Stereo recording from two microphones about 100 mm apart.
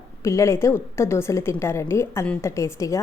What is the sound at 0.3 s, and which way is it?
A woman's voice, 30° left (ahead or behind).